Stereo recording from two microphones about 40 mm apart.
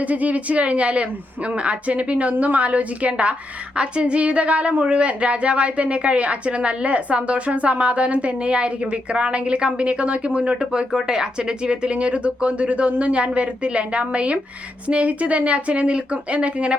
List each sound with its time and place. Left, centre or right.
0.0 s a woman's voice: right
10.9 s a woman's voice: centre